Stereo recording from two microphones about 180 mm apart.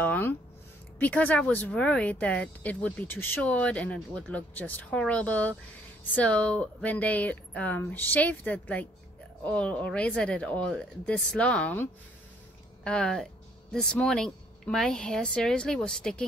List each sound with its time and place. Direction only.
0.0 s speech: 10° left (ahead or behind)